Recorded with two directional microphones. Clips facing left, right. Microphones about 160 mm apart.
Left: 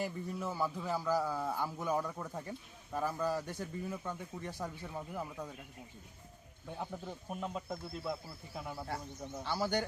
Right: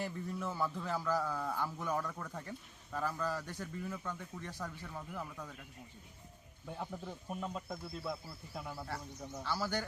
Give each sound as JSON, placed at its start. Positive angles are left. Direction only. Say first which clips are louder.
{"t": 0.0, "sound": "a man's voice", "louder": "left 1 dB", "side_deg": 10}
{"t": 6.7, "sound": "a man's voice", "louder": "left 1 dB", "side_deg": 5}
{"t": 9.4, "sound": "speech", "louder": "left 3 dB", "side_deg": 20}